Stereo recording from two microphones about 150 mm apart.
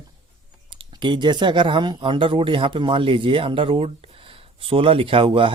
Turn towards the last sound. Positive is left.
turn(degrees=-35)  # may be behind; listen again after turning